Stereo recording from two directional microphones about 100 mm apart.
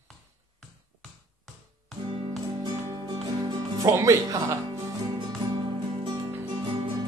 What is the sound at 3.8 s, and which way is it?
Speech, 35° right (ahead or behind).